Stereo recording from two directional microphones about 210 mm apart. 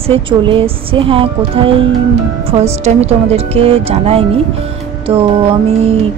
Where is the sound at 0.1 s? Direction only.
25° right (ahead or behind).